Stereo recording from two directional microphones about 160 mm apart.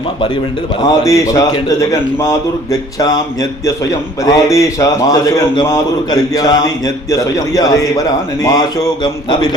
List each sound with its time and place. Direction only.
0.8 s a man's voice: 20° left (ahead or behind)
4.2 s a man's voice: 20° left (ahead or behind)